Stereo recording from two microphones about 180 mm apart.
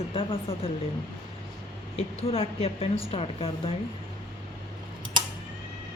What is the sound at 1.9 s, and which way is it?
A woman's voice, 35° left (ahead or behind).